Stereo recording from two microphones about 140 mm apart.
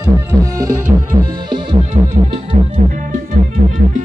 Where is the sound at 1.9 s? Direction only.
45° right (ahead or behind).